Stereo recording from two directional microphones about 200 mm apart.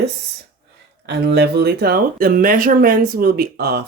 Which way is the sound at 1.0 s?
55° right (ahead or behind).